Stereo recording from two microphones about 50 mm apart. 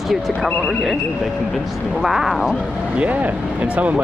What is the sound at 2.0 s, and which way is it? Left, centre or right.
Speech, centre.